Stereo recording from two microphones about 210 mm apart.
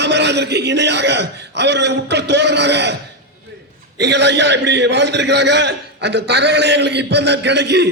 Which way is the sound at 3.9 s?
55° right (ahead or behind).